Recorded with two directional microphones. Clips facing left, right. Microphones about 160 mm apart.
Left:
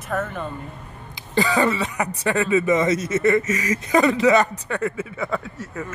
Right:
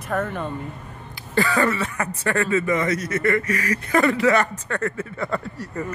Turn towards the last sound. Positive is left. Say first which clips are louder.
# right 2 dB
turn(degrees=0)  # may be behind; listen again after turning